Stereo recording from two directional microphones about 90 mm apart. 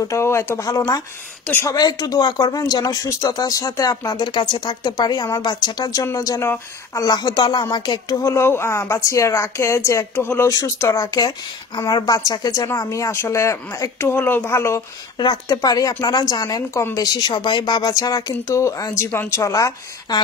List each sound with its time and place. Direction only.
0.0 s speech: 35° left (ahead or behind)
4.2 s speech: 60° left (ahead or behind)
8.2 s speech: 30° left (ahead or behind)
10.5 s speech: 35° left (ahead or behind)
15.1 s speech: 55° left (ahead or behind); by 19.7 s 35° left (ahead or behind)